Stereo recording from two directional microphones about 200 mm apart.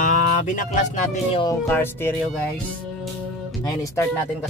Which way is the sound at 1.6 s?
10° left (ahead or behind).